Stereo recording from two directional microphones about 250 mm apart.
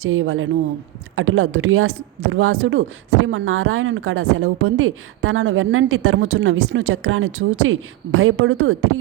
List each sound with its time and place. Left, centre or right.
0.0 s speech: right